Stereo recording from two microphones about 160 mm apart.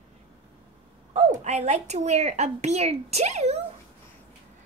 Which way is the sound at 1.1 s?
45° right (ahead or behind).